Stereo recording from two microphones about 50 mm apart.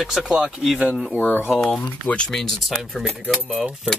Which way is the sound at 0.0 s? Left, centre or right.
Centre.